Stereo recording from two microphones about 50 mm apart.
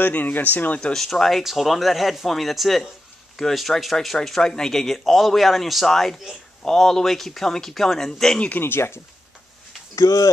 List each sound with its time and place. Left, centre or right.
0.0 s speech: left
0.9 s speech: centre
8.5 s speech: left